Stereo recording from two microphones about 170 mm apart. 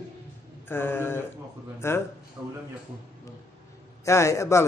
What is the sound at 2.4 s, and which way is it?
Speech, 10° right (ahead or behind).